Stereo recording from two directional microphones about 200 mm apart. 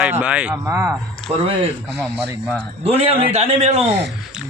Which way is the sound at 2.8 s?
30° right (ahead or behind).